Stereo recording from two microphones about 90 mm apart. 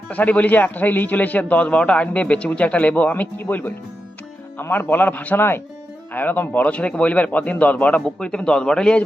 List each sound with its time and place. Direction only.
0.1 s a man's voice: 15° left (ahead or behind)